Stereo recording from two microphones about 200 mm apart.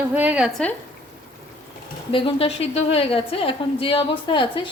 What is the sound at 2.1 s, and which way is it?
A woman's voice, 25° left (ahead or behind).